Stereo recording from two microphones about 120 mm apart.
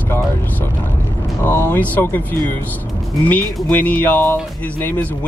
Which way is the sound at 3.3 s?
15° left (ahead or behind).